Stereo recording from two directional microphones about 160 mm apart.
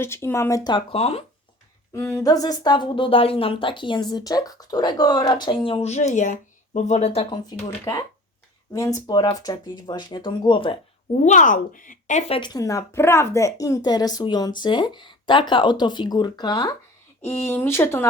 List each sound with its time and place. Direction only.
0.0 s speech: 15° left (ahead or behind); by 1.2 s 40° left (ahead or behind)
1.9 s speech: 20° left (ahead or behind); by 7.3 s 40° left (ahead or behind)
7.3 s speech: 25° left (ahead or behind)
11.2 s speech: 50° left (ahead or behind)
12.3 s speech: 25° left (ahead or behind)
17.2 s speech: 15° left (ahead or behind)